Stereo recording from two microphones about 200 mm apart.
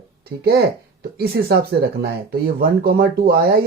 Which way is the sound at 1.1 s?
50° right (ahead or behind).